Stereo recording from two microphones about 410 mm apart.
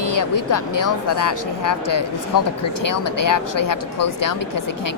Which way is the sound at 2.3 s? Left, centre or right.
Left.